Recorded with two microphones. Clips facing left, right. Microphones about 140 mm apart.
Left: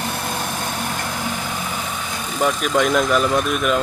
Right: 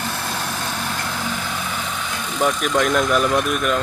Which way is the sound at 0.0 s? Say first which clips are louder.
Left 1 dB; 15° left (ahead or behind).